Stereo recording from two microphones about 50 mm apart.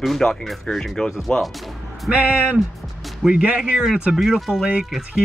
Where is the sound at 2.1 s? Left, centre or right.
Right.